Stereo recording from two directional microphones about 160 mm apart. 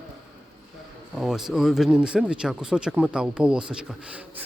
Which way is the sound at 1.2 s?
5° right (ahead or behind).